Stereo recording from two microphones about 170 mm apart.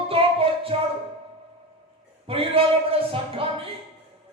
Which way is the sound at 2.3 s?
35° right (ahead or behind).